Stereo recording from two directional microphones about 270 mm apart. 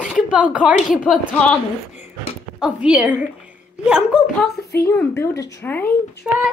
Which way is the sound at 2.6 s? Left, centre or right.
Centre.